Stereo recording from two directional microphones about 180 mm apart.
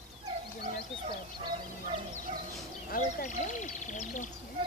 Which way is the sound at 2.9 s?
45° left (ahead or behind).